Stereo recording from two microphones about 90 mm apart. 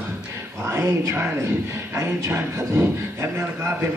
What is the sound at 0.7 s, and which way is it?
A man's voice, 35° right (ahead or behind).